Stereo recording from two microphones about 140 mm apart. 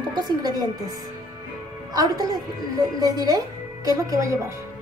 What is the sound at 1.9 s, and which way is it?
A woman's voice, 25° right (ahead or behind).